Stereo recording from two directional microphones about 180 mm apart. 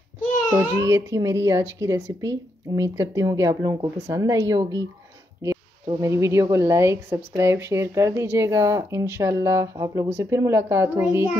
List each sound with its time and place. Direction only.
0.5 s speech: 15° right (ahead or behind)